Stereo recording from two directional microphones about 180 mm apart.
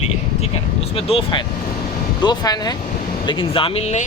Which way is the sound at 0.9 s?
30° left (ahead or behind).